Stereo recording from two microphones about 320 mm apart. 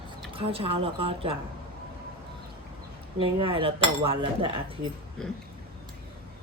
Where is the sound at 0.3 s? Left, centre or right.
Centre.